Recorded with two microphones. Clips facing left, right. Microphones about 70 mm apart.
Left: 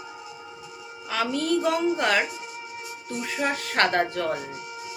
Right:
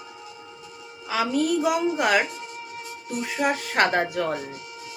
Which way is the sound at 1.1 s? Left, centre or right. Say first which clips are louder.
Right 2 dB; centre.